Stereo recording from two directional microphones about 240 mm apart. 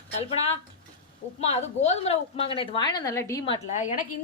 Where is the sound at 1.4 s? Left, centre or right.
Left.